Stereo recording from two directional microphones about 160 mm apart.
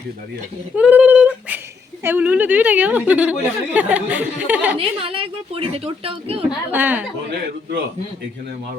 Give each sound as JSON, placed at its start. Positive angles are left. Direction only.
{"t": 0.8, "sound": "a sound", "side_deg": -10}
{"t": 2.0, "sound": "speech", "side_deg": -10}
{"t": 4.8, "sound": "a woman's voice", "side_deg": -35}
{"t": 6.7, "sound": "speech", "side_deg": -10}